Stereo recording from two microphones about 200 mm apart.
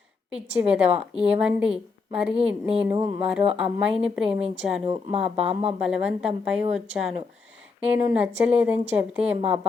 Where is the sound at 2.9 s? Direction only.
30° right (ahead or behind).